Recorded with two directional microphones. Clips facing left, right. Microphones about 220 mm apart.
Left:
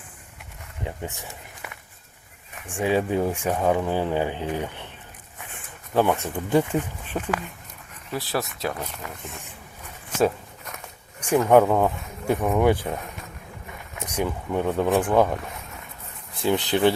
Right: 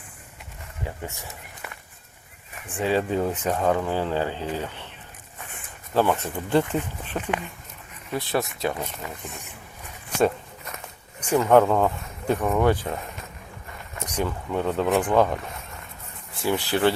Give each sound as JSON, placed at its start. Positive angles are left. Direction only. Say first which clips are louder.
{"t": 0.9, "sound": "speech", "louder": "left 2 dB", "side_deg": 15}
{"t": 2.6, "sound": "speech", "louder": "left 1 dB", "side_deg": 15}
{"t": 6.2, "sound": "speech", "louder": "left 1 dB", "side_deg": 10}
{"t": 10.2, "sound": "walk", "louder": "even", "side_deg": 5}
{"t": 11.3, "sound": "speech", "louder": "left 1 dB", "side_deg": 10}
{"t": 16.4, "sound": "speech", "louder": "left 2 dB", "side_deg": 20}